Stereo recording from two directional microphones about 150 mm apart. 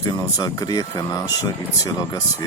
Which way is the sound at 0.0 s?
25° left (ahead or behind).